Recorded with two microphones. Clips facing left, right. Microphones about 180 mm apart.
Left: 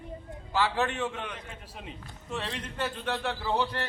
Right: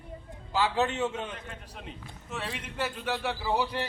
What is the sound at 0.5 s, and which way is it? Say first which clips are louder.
Speech: right 1 dB; 20° right (ahead or behind).